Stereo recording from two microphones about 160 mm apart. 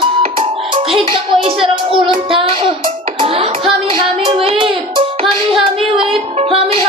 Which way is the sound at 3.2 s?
35° right (ahead or behind).